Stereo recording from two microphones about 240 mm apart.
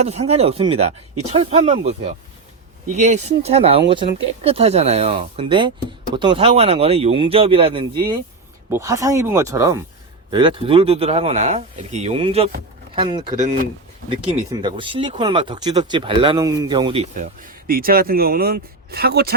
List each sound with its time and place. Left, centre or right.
0.0 s speech: right